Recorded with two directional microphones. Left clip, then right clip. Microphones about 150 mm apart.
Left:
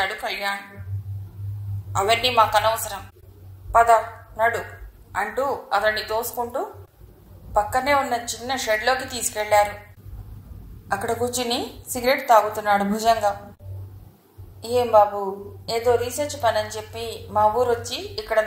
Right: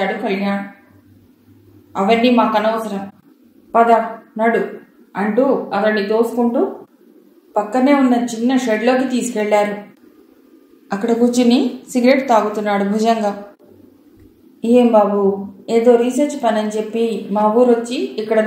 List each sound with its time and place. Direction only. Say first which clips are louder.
0.0 s a woman's voice: right 5 dB; 50° left (ahead or behind)
1.9 s a woman's voice: right 6 dB; 50° left (ahead or behind)
3.7 s a woman's voice: right 4 dB; 35° left (ahead or behind)
10.9 s a woman's voice: right 7 dB; 30° left (ahead or behind)
14.6 s a woman's voice: right 5 dB; 30° left (ahead or behind)